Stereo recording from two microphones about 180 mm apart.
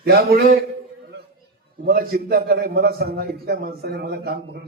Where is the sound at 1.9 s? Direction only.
55° right (ahead or behind).